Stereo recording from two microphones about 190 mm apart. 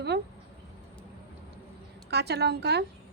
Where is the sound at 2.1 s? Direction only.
60° right (ahead or behind).